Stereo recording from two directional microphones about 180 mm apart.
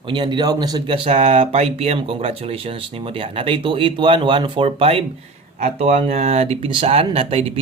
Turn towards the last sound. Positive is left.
turn(degrees=-30)  # may be behind; listen again after turning